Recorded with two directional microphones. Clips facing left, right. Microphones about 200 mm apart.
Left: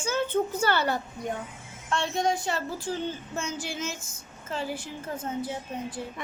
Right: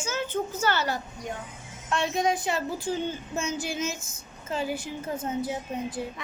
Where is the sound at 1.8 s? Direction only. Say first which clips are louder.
Right 1 dB; 15° right (ahead or behind).